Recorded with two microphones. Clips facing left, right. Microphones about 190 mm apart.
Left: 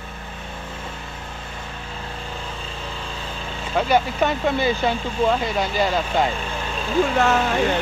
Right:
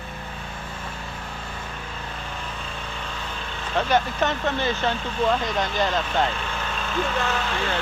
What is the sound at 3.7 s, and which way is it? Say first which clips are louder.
Speech: left 3 dB; 10° left (ahead or behind).